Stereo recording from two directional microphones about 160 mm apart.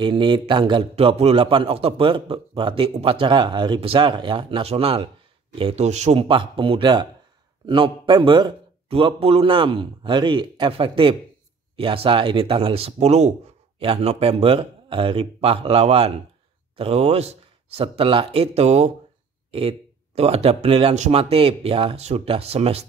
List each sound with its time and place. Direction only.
0.0 s a man's voice: 30° right (ahead or behind)
20.2 s a man's voice: 40° right (ahead or behind)